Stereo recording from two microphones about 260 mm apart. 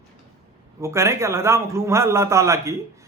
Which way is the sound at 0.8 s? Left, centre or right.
Centre.